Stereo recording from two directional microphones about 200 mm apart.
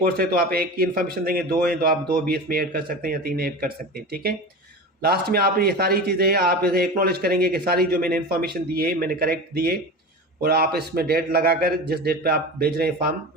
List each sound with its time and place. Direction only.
0.0 s speech: 50° right (ahead or behind)